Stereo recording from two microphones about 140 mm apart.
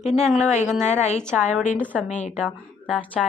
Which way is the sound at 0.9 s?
55° left (ahead or behind).